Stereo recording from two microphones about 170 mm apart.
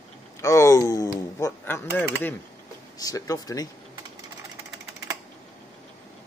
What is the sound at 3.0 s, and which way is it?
Speech, 20° left (ahead or behind).